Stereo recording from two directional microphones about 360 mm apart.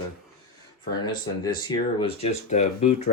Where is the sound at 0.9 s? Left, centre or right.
Centre.